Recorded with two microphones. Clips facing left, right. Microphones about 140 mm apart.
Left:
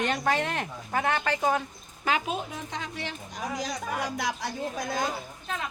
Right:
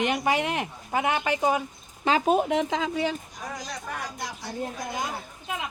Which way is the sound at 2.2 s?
50° right (ahead or behind).